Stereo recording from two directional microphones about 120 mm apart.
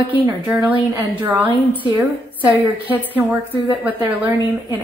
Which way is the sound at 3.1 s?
15° right (ahead or behind).